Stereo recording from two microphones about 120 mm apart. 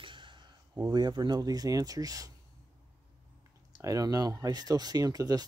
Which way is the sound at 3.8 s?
30° right (ahead or behind).